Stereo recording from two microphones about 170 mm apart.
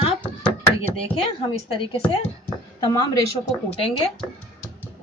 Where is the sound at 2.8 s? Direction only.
20° left (ahead or behind).